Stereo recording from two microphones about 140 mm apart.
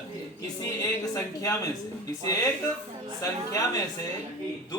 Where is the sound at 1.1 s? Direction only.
25° left (ahead or behind).